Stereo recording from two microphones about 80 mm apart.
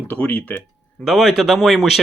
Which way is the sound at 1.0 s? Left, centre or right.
Centre.